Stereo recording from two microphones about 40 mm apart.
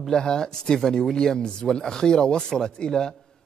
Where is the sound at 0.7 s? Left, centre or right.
Centre.